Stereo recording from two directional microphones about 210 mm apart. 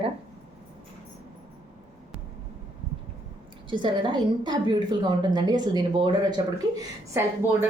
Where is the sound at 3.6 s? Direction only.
20° right (ahead or behind).